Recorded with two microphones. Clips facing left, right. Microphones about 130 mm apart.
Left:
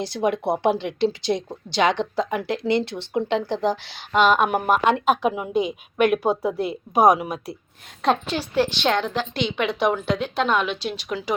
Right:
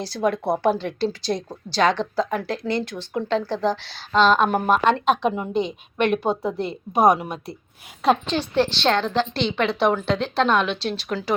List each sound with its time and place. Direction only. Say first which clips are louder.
0.0 s speech: even; 20° left (ahead or behind)